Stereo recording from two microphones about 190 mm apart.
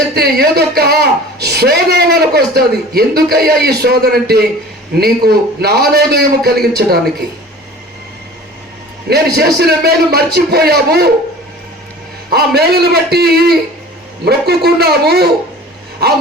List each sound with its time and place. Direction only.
0.1 s a woman's voice: 55° right (ahead or behind)
9.0 s a man's voice: 55° right (ahead or behind)
12.3 s a man's voice: 55° right (ahead or behind)